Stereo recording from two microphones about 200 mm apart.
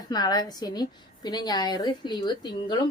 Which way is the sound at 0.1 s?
20° left (ahead or behind).